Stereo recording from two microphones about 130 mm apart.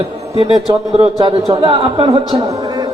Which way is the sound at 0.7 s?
50° right (ahead or behind).